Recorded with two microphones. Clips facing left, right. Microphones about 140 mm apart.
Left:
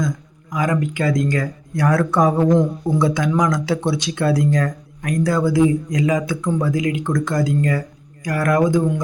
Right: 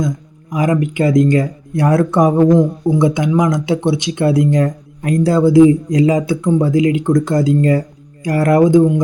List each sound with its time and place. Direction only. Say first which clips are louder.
0.5 s speech: right 5 dB; 25° right (ahead or behind)